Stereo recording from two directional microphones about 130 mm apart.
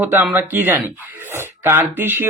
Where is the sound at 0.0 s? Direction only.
15° right (ahead or behind).